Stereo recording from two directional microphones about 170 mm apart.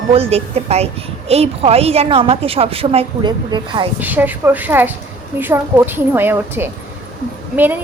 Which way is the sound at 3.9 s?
10° right (ahead or behind).